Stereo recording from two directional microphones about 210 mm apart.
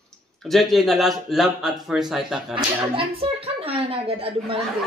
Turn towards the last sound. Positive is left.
turn(degrees=-25)  # may be behind; listen again after turning